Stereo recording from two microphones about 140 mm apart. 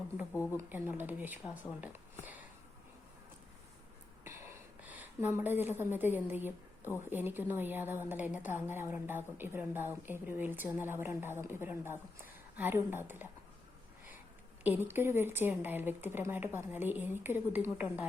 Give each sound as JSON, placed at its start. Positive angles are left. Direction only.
{"t": 0.5, "sound": "a woman's voice", "side_deg": -15}
{"t": 4.2, "sound": "a sound", "side_deg": -15}
{"t": 7.1, "sound": "a woman's voice", "side_deg": -15}
{"t": 14.6, "sound": "a woman's voice", "side_deg": -15}